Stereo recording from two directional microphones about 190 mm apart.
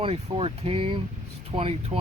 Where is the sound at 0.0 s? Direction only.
30° right (ahead or behind).